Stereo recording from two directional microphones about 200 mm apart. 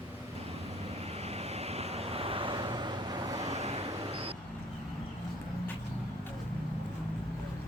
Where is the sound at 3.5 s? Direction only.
30° right (ahead or behind).